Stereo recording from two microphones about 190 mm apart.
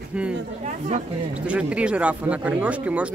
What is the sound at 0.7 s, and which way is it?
Speech, 40° right (ahead or behind).